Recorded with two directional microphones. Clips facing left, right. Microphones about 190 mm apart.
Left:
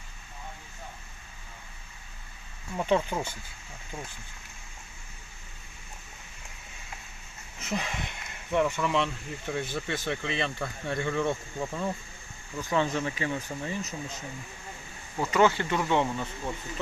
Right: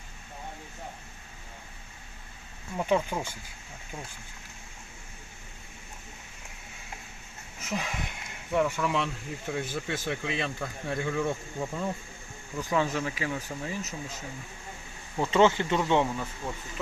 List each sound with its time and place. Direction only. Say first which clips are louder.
2.7 s speech: left 1 dB; 10° right (ahead or behind)
7.6 s speech: left 1 dB; 5° right (ahead or behind)
15.2 s speech: right 1 dB; 25° right (ahead or behind)
16.0 s speech: left 1 dB; centre (ahead or behind)